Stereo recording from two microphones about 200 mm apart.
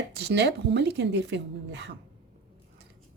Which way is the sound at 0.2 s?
55° right (ahead or behind).